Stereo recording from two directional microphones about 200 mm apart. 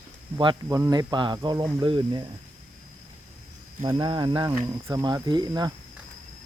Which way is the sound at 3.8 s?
20° right (ahead or behind).